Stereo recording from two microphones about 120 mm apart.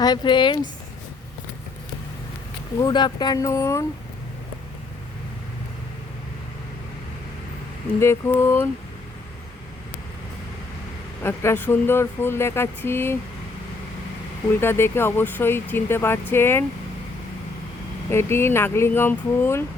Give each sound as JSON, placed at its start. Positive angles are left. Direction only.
{"t": 0.0, "sound": "speech", "side_deg": 35}
{"t": 2.8, "sound": "speech", "side_deg": 35}
{"t": 7.9, "sound": "speech", "side_deg": 20}
{"t": 11.2, "sound": "speech", "side_deg": 20}
{"t": 14.6, "sound": "speech", "side_deg": 20}
{"t": 18.1, "sound": "speech", "side_deg": 20}